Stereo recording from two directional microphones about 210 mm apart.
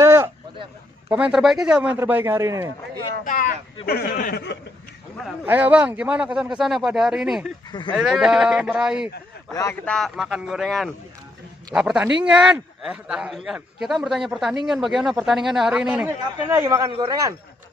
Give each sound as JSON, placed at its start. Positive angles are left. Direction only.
{"t": 0.0, "sound": "a sound", "side_deg": -10}
{"t": 1.0, "sound": "speech", "side_deg": -5}
{"t": 3.3, "sound": "speech", "side_deg": 40}
{"t": 5.4, "sound": "a man's voice", "side_deg": -10}
{"t": 9.5, "sound": "a man's voice", "side_deg": 15}
{"t": 9.9, "sound": "a man's voice", "side_deg": 0}